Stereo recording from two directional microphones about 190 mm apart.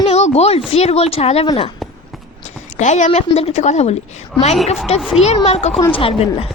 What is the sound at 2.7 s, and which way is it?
A woman's voice, 40° left (ahead or behind).